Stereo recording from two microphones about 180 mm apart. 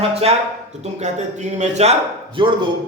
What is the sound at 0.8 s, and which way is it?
Speech, 40° right (ahead or behind).